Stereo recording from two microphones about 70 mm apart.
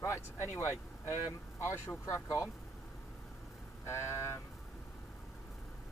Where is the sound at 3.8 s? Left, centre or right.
Left.